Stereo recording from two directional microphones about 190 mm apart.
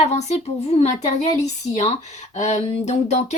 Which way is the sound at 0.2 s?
35° left (ahead or behind).